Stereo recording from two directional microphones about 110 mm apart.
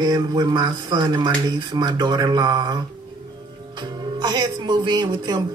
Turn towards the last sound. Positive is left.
turn(degrees=-40)  # may be behind; listen again after turning